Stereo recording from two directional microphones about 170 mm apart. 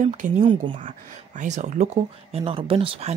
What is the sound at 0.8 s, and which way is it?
Speech, 45° right (ahead or behind).